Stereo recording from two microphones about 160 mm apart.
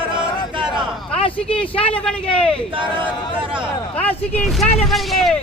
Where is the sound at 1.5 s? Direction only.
10° left (ahead or behind).